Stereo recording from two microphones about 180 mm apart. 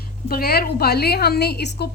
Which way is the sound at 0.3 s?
60° left (ahead or behind).